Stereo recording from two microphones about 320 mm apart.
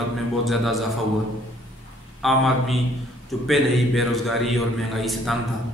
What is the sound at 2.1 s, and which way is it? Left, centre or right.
A man's voice, centre.